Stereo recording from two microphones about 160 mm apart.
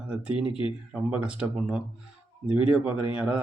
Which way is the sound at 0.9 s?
5° right (ahead or behind).